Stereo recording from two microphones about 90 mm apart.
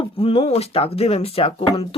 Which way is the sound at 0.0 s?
90° left.